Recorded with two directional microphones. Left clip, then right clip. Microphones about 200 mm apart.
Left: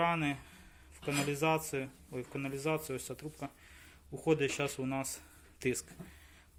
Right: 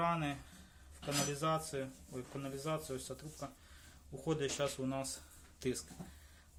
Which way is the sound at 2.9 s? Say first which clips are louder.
Left 3 dB; 30° left (ahead or behind).